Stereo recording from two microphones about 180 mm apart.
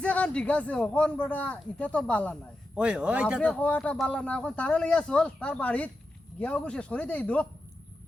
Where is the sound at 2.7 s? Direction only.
5° right (ahead or behind).